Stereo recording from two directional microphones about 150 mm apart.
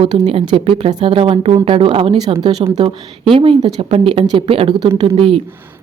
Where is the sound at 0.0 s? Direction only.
35° right (ahead or behind).